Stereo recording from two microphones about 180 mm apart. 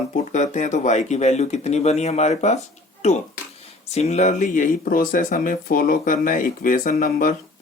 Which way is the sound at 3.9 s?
35° left (ahead or behind).